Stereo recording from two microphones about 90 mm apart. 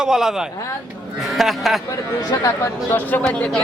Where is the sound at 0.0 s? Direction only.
5° right (ahead or behind).